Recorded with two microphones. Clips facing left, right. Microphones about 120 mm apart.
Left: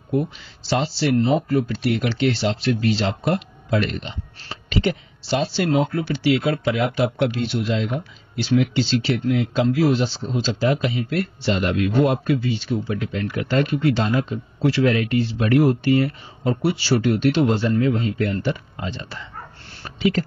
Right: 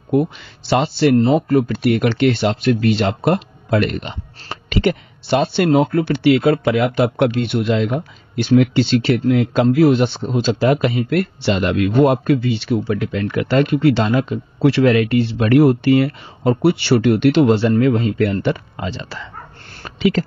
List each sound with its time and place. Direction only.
0.1 s speech: 65° right (ahead or behind); by 11.8 s 80° right
12.0 s speech: 55° right (ahead or behind); by 19.2 s 90° right
19.7 s a sound: 90° right